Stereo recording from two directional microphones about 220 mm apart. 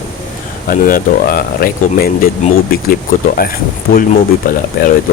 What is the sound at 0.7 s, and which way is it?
Speech, 40° left (ahead or behind).